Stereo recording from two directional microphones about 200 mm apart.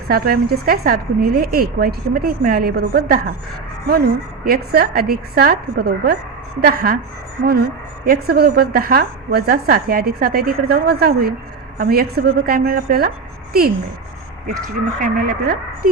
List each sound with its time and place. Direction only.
0.1 s a woman's voice: 50° right (ahead or behind)
8.0 s a woman's voice: 50° right (ahead or behind)
15.0 s a woman's voice: 45° right (ahead or behind)